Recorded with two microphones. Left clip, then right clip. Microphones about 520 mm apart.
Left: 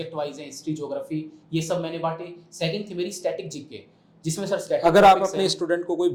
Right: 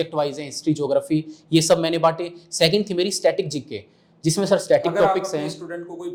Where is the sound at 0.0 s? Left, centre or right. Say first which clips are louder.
Right 7 dB; right.